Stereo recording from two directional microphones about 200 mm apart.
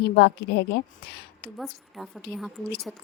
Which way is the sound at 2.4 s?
Centre (ahead or behind).